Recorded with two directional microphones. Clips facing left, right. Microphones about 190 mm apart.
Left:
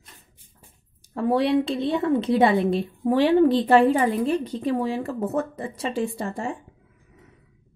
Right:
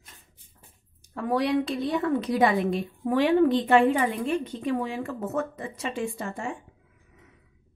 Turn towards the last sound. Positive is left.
turn(degrees=35)  # may be behind; listen again after turning